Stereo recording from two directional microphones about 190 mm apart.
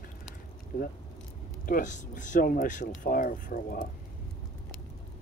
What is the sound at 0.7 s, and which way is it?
Speech, 50° left (ahead or behind).